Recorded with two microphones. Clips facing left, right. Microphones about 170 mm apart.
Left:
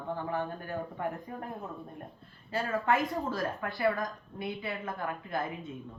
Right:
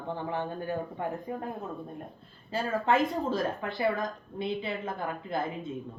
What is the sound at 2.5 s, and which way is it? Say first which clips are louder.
A woman's voice: right 2 dB; 25° right (ahead or behind).